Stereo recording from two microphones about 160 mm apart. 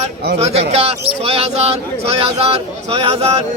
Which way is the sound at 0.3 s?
40° right (ahead or behind).